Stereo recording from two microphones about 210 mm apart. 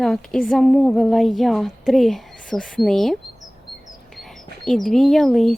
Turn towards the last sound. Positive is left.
turn(degrees=0)  # may be behind; listen again after turning